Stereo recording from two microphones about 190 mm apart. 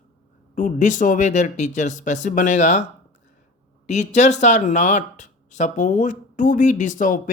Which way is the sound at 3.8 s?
35° left (ahead or behind).